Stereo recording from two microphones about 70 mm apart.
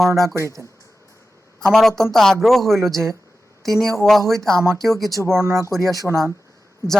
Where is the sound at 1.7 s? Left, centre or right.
Centre.